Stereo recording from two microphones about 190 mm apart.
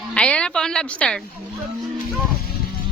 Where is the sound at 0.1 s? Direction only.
5° left (ahead or behind).